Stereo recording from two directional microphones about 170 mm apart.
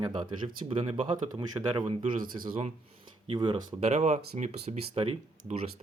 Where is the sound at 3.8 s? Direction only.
40° right (ahead or behind).